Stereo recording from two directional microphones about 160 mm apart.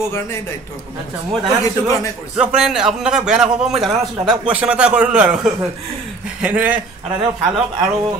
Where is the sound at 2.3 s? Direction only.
5° right (ahead or behind).